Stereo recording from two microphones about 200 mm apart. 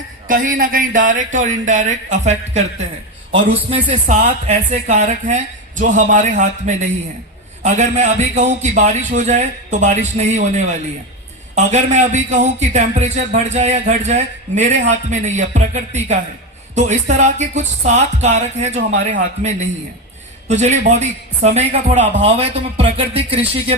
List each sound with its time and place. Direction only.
0.3 s a man's voice: 45° right (ahead or behind)
11.5 s a man's voice: 35° right (ahead or behind)